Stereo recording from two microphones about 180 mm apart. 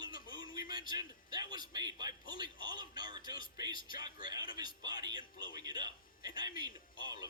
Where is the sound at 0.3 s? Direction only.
20° right (ahead or behind).